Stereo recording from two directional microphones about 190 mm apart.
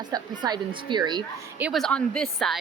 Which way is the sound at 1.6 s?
Centre (ahead or behind).